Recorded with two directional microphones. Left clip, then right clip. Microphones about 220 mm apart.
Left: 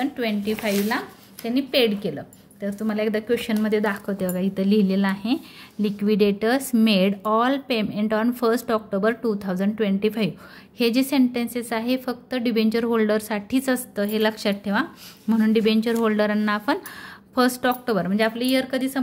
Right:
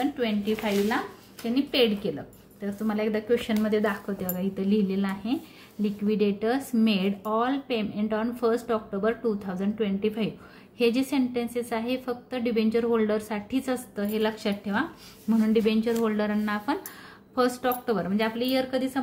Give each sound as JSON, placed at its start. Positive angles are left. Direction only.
{"t": 0.0, "sound": "a woman's voice", "side_deg": 40}